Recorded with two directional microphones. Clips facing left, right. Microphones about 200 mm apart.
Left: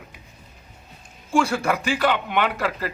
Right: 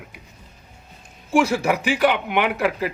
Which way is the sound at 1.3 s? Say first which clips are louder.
Right 2 dB; 15° right (ahead or behind).